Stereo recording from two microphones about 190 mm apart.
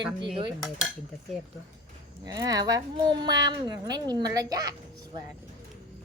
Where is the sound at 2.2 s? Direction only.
20° right (ahead or behind).